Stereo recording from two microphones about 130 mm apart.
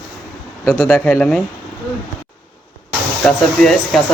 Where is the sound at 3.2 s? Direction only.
5° left (ahead or behind).